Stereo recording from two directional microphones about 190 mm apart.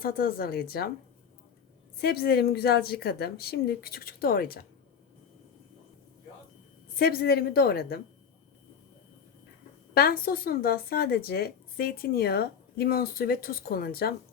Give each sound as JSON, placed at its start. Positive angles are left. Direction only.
{"t": 0.0, "sound": "speech", "side_deg": 50}
{"t": 2.0, "sound": "a woman's voice", "side_deg": 55}
{"t": 7.0, "sound": "speech", "side_deg": 55}
{"t": 9.9, "sound": "speech", "side_deg": 50}